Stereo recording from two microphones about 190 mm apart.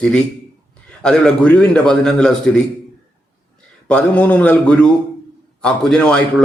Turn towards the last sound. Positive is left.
turn(degrees=5)  # may be behind; listen again after turning